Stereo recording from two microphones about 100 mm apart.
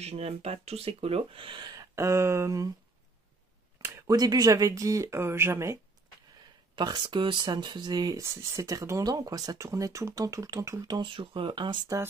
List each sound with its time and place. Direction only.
0.0 s speech: 90° right; by 1.7 s 60° right (ahead or behind)
1.7 s a sound: 35° right (ahead or behind)
4.1 s speech: 40° right (ahead or behind)
6.7 s speech: 50° right (ahead or behind)
8.2 s speech: 30° right (ahead or behind)
10.9 s speech: 50° right (ahead or behind)